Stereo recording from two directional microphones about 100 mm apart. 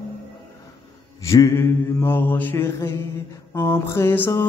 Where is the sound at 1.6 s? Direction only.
20° left (ahead or behind).